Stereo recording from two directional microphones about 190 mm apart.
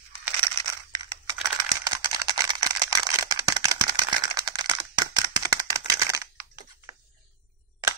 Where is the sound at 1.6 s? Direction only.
20° right (ahead or behind).